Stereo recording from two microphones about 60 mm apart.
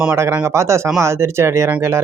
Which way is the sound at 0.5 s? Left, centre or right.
Right.